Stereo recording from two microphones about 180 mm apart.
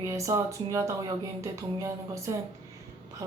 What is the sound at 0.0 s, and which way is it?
Speech, 15° right (ahead or behind).